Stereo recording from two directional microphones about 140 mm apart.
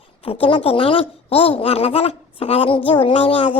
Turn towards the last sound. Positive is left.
turn(degrees=40)  # may be behind; listen again after turning